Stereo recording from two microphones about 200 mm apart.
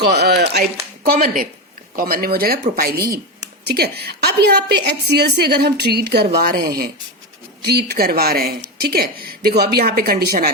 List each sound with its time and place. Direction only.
0.0 s a woman's voice: 55° right (ahead or behind)